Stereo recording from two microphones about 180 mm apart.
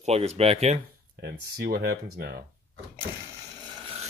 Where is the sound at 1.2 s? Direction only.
60° right (ahead or behind).